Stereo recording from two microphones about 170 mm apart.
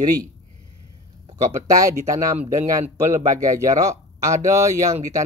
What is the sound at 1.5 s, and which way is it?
Speech, 20° right (ahead or behind).